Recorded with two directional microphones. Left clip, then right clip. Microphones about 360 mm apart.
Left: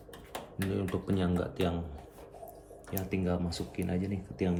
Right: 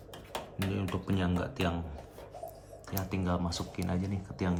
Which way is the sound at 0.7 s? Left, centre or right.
Centre.